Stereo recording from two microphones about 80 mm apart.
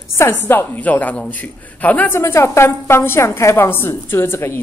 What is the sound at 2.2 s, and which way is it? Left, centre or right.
A woman's voice, left.